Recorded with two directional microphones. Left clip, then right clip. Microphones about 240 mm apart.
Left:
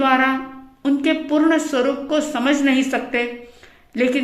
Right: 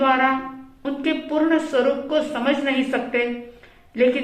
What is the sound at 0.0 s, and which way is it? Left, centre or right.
A woman's voice, left.